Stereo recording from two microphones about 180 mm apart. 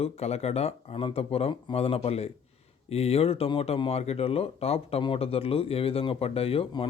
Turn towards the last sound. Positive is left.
turn(degrees=30)  # may be behind; listen again after turning